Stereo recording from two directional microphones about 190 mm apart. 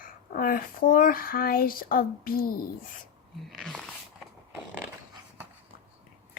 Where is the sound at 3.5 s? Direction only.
Centre (ahead or behind).